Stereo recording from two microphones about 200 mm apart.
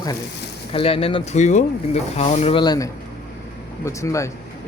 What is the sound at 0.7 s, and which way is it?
Speech, 30° left (ahead or behind).